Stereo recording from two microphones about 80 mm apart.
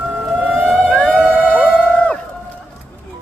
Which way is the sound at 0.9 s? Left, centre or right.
Centre.